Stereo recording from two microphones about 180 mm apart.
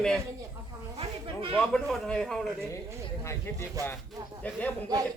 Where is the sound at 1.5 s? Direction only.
5° left (ahead or behind).